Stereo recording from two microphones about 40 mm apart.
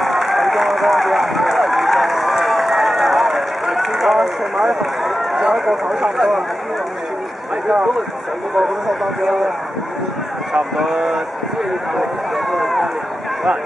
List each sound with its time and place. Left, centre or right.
0.0 s run: centre
5.5 s speech: centre
5.9 s speech: right
8.5 s speech: centre
10.5 s speech: centre
12.4 s speech: centre